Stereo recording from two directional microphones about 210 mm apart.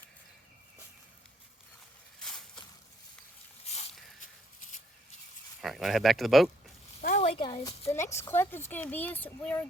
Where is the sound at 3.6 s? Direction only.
30° left (ahead or behind).